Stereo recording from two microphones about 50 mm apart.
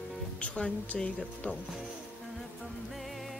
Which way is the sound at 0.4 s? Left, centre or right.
Left.